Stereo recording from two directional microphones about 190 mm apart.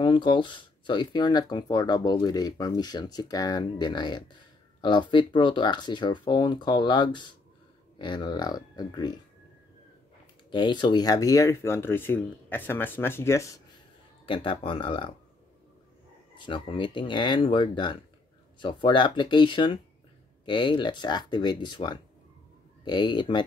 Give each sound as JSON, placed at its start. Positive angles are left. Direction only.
{"t": 0.0, "sound": "speech", "side_deg": 25}
{"t": 10.5, "sound": "speech", "side_deg": 25}
{"t": 14.2, "sound": "speech", "side_deg": 25}
{"t": 16.3, "sound": "speech", "side_deg": 25}